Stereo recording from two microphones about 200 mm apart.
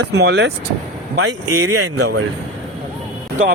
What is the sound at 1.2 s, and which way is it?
Speech, 90° right.